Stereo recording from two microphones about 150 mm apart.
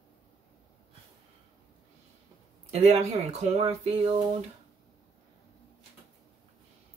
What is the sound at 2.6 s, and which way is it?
Speech, 45° right (ahead or behind).